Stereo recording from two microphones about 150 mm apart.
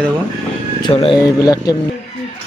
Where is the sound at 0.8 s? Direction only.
35° left (ahead or behind).